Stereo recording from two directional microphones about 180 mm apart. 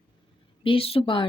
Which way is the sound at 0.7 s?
30° left (ahead or behind).